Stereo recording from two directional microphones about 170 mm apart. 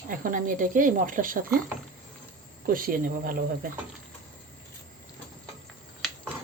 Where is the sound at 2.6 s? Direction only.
55° right (ahead or behind).